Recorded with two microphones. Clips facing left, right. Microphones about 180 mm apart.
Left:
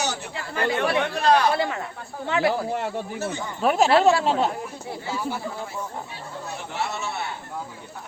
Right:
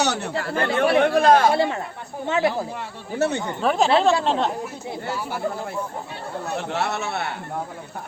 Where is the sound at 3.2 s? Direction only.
65° right (ahead or behind).